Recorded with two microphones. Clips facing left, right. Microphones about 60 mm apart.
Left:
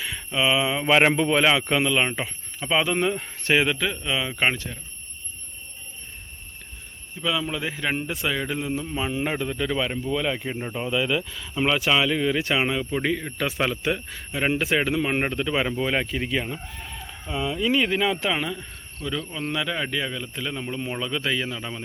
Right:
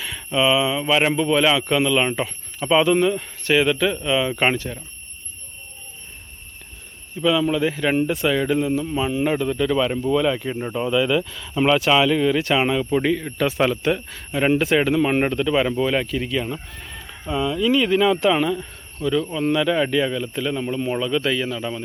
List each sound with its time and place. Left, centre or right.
0.0 s speech: centre; by 0.9 s left
0.9 s a man's voice: left
1.3 s a man's voice: left
1.7 s speech: centre
3.0 s a man's voice: left
4.0 s speech: centre
7.2 s speech: centre
17.2 s speech: centre
17.6 s speech: centre